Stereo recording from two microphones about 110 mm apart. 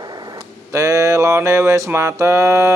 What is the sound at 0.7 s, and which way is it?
Speech, 25° right (ahead or behind).